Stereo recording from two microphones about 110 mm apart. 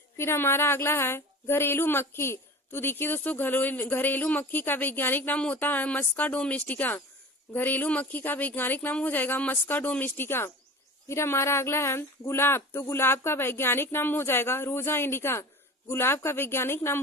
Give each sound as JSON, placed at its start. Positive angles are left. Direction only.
{"t": 0.2, "sound": "a woman's voice", "side_deg": 20}